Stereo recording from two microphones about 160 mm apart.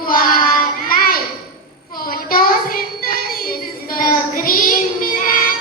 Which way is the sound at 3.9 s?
60° left (ahead or behind).